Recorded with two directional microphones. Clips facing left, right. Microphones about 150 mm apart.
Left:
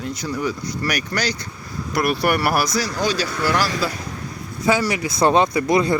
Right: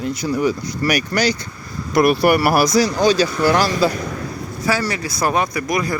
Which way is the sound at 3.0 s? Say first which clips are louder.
Right 6 dB; 25° right (ahead or behind).